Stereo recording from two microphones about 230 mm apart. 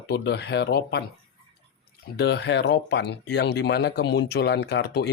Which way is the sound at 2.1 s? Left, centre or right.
Left.